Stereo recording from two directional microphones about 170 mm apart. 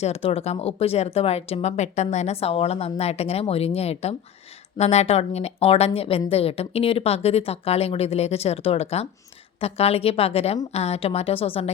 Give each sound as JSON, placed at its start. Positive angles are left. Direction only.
{"t": 0.0, "sound": "a woman's voice", "side_deg": 35}